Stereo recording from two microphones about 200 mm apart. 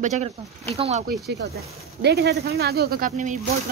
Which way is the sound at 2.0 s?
55° right (ahead or behind).